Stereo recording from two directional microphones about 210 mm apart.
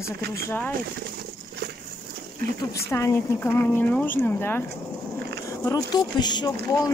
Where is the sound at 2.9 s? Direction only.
10° left (ahead or behind).